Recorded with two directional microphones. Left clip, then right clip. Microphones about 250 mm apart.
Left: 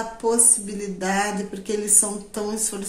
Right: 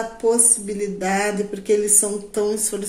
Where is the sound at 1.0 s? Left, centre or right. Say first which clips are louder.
Right 1 dB; centre.